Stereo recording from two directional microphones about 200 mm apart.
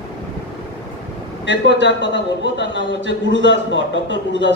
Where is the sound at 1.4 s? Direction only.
65° left (ahead or behind).